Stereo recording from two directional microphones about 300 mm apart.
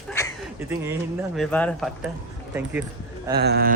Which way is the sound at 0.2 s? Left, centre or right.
Centre.